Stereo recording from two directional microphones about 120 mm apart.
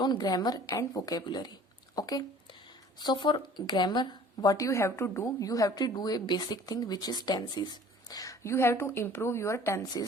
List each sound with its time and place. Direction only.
0.0 s speech: 35° left (ahead or behind)